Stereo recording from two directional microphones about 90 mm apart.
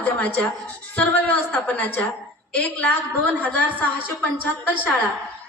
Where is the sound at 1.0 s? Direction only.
15° left (ahead or behind).